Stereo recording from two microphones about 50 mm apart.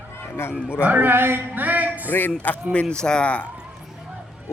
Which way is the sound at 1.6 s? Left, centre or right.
Right.